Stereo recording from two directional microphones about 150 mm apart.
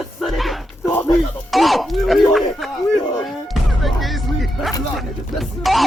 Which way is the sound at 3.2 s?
Centre (ahead or behind).